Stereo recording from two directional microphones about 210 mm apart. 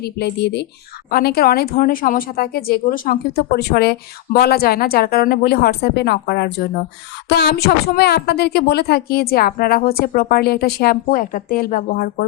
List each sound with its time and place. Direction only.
0.0 s speech: 50° left (ahead or behind)